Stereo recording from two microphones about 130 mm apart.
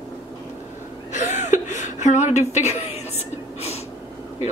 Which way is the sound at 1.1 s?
65° left (ahead or behind).